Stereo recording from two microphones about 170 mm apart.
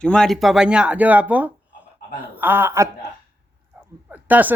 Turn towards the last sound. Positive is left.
turn(degrees=-10)  # may be behind; listen again after turning